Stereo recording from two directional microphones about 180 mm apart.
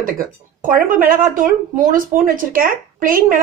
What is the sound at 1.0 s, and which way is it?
A woman's voice, 50° right (ahead or behind).